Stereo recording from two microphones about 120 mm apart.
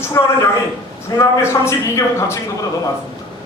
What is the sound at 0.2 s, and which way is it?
A man's voice, 25° left (ahead or behind).